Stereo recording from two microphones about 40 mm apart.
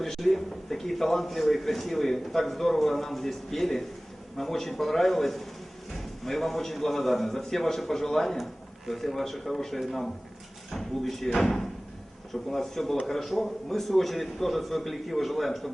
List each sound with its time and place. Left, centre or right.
0.0 s a man's voice: centre
11.3 s speech: centre
12.3 s a man's voice: centre